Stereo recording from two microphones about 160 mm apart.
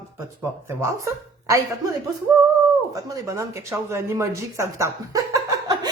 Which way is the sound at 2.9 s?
20° right (ahead or behind).